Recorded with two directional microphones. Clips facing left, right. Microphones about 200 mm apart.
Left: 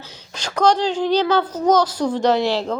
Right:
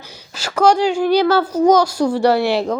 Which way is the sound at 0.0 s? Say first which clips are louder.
Right 2 dB; 10° right (ahead or behind).